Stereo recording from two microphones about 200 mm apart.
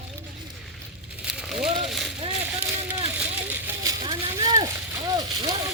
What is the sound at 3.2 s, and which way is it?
Vehicle, 10° right (ahead or behind).